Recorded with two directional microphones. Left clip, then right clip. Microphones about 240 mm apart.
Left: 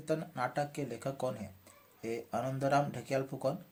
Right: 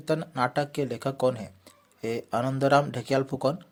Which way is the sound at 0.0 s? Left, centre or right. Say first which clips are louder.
Right 8 dB; right.